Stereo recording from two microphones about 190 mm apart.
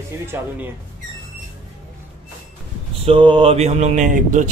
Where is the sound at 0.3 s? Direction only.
10° right (ahead or behind).